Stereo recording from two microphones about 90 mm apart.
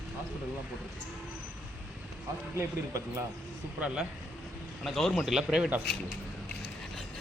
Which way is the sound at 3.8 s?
10° right (ahead or behind).